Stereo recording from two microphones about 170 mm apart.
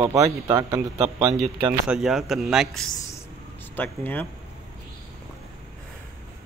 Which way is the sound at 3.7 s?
10° left (ahead or behind).